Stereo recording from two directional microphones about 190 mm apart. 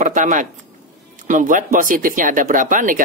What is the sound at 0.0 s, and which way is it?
Speech, 40° right (ahead or behind).